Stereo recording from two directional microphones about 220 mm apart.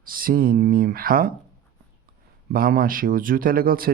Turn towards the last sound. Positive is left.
turn(degrees=-40)  # may be behind; listen again after turning